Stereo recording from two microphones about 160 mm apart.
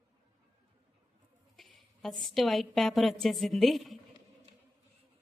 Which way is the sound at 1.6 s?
Centre (ahead or behind).